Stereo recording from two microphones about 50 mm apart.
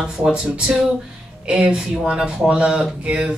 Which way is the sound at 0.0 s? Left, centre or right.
Centre.